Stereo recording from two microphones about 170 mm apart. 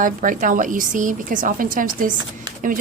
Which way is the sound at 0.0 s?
50° right (ahead or behind).